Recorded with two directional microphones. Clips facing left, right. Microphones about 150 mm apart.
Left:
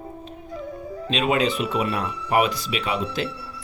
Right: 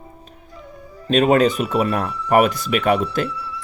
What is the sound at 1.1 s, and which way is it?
Speech, 45° right (ahead or behind).